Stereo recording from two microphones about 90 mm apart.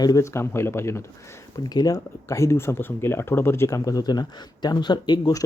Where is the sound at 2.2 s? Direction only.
30° left (ahead or behind).